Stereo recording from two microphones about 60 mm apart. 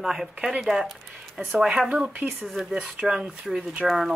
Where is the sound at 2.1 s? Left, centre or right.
Right.